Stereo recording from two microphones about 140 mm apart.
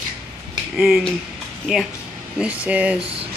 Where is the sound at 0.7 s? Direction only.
5° right (ahead or behind).